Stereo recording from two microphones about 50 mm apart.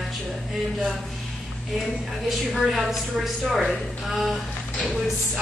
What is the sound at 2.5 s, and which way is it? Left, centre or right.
A woman's voice, centre.